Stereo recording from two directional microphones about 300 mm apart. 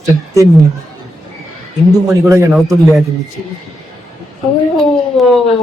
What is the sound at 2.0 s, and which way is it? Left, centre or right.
Speech, centre.